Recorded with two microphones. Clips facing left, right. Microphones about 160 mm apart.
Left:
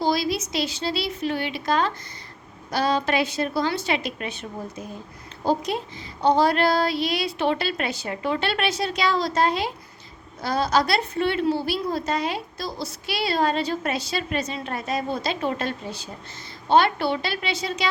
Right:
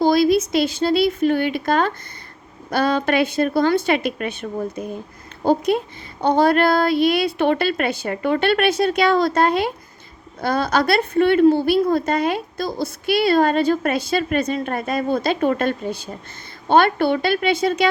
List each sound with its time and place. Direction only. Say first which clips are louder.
0.0 s a woman's voice: right 8 dB; 50° right (ahead or behind)